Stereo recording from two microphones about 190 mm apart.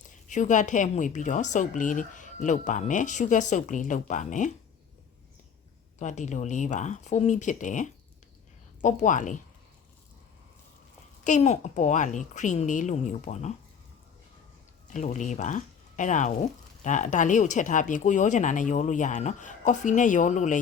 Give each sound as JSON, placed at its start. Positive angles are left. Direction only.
{"t": 0.3, "sound": "speech", "side_deg": 40}
{"t": 6.0, "sound": "speech", "side_deg": 40}
{"t": 11.2, "sound": "speech", "side_deg": 40}
{"t": 14.8, "sound": "speech", "side_deg": 40}